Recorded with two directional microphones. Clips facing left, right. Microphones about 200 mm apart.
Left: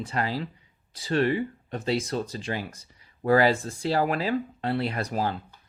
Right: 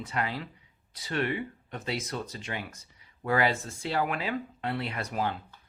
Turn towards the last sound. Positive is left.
turn(degrees=35)  # may be behind; listen again after turning